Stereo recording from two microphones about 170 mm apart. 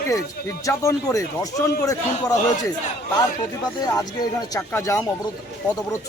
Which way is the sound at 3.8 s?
20° left (ahead or behind).